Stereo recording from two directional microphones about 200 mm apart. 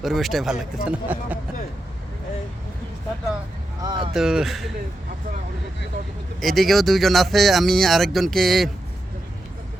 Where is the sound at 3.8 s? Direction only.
20° right (ahead or behind).